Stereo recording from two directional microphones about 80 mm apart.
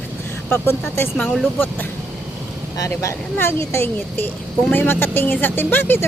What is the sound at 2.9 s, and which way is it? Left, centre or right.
Speech, left.